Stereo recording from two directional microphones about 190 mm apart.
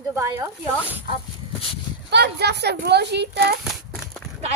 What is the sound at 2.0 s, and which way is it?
Speech, 60° right (ahead or behind).